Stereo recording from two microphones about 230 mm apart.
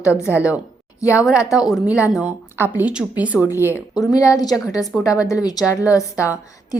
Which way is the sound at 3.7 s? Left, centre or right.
Centre.